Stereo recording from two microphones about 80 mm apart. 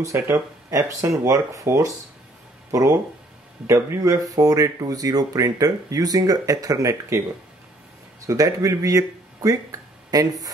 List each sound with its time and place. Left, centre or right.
0.1 s speech: right
8.3 s speech: right